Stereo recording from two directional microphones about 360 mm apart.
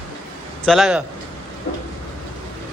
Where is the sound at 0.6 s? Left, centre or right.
Centre.